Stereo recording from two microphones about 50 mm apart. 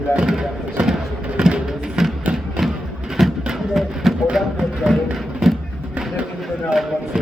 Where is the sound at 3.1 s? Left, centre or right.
Centre.